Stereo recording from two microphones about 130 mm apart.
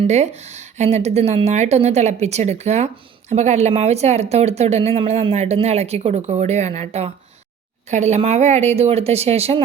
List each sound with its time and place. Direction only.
0.1 s speech: 60° right (ahead or behind)